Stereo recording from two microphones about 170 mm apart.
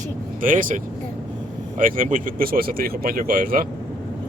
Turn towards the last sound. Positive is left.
turn(degrees=-60)  # may be behind; listen again after turning